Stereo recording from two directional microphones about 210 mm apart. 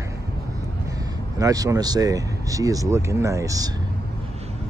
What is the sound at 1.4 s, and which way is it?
Speech, 15° right (ahead or behind).